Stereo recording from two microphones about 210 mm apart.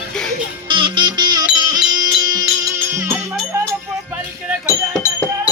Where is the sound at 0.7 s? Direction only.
25° right (ahead or behind).